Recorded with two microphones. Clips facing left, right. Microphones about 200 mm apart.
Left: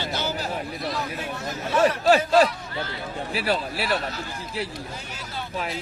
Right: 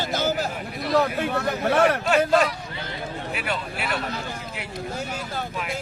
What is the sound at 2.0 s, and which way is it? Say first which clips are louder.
A man's voice: left 2 dB; 35° left (ahead or behind).